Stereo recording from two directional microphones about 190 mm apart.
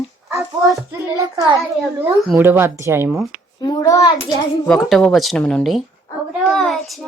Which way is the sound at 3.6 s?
20° left (ahead or behind).